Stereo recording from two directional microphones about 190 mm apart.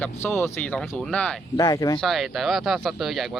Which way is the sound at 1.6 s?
15° left (ahead or behind).